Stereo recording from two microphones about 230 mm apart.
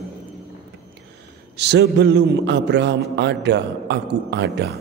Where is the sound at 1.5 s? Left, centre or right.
Right.